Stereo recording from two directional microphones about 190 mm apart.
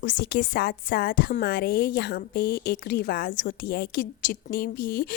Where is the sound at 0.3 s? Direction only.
50° left (ahead or behind).